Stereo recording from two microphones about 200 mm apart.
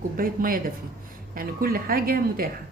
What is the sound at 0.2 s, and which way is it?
A woman's voice, 45° right (ahead or behind).